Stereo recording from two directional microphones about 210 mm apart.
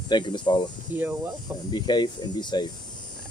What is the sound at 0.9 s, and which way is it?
Speech, 10° right (ahead or behind).